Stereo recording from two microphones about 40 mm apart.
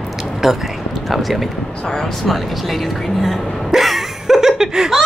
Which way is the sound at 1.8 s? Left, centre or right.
Centre.